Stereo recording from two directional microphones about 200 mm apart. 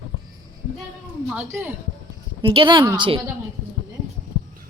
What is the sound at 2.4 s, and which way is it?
Speech, 25° right (ahead or behind).